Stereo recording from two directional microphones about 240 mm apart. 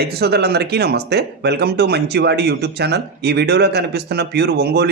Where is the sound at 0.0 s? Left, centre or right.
Right.